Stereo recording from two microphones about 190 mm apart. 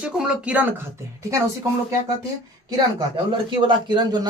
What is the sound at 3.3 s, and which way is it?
Speech, 25° right (ahead or behind).